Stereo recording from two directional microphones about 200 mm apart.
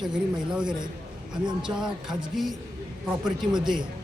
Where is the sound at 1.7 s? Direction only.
5° right (ahead or behind).